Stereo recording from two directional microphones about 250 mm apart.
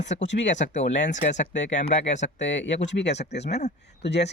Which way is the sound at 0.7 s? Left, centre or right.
Left.